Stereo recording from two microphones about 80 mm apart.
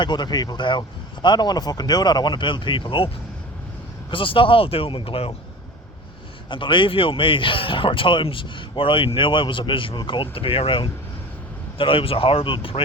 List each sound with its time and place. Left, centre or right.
0.0 s speech: left
0.6 s speech: left
4.1 s speech: left
6.5 s speech: left
11.8 s speech: left